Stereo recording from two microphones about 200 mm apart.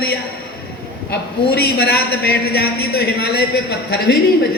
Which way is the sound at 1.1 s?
50° left (ahead or behind).